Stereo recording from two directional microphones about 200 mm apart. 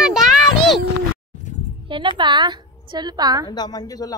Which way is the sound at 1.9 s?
25° right (ahead or behind).